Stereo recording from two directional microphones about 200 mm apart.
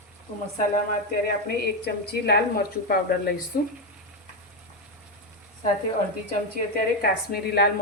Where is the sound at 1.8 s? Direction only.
55° left (ahead or behind).